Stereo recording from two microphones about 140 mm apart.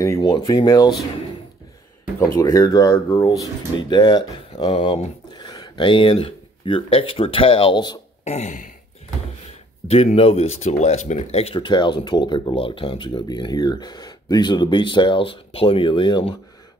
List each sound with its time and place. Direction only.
0.0 s speech: 25° left (ahead or behind)
2.1 s speech: 20° left (ahead or behind)
4.7 s speech: 45° left (ahead or behind)
5.3 s speech: 30° left (ahead or behind)
8.2 s a sound: 55° left (ahead or behind)
9.8 s speech: 45° left (ahead or behind)